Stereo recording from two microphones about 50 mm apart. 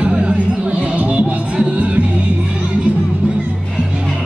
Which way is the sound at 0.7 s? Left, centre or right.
Right.